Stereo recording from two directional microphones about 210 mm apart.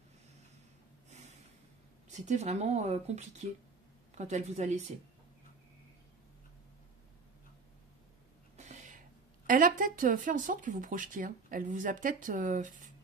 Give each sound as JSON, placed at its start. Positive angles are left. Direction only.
{"t": 2.0, "sound": "speech", "side_deg": -35}
{"t": 8.5, "sound": "a sound", "side_deg": -35}
{"t": 9.5, "sound": "speech", "side_deg": -40}